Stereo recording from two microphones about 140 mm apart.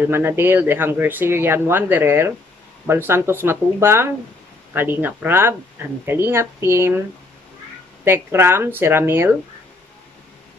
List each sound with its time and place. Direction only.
0.1 s speech: 15° right (ahead or behind)
8.0 s speech: 15° right (ahead or behind)